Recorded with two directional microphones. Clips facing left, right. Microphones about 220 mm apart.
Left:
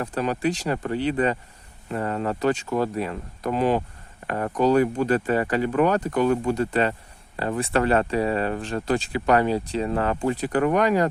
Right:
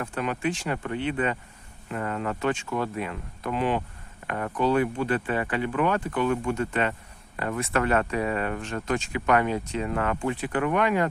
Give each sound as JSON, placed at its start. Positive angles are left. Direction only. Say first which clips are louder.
{"t": 0.0, "sound": "speech", "louder": "left 4 dB", "side_deg": 35}